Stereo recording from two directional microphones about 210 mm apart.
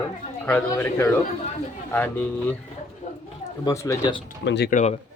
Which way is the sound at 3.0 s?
35° left (ahead or behind).